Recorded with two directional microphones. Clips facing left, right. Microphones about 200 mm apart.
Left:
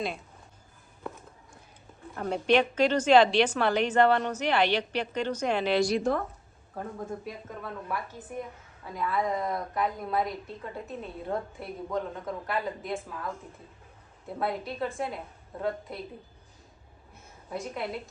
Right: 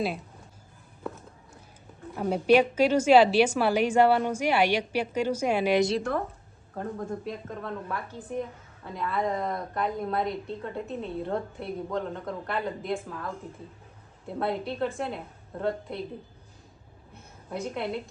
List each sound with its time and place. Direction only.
2.1 s a woman's voice: 5° right (ahead or behind)
6.7 s a woman's voice: centre (ahead or behind)
10.8 s a woman's voice: 25° right (ahead or behind)
11.3 s a woman's voice: centre (ahead or behind)
17.5 s a woman's voice: centre (ahead or behind)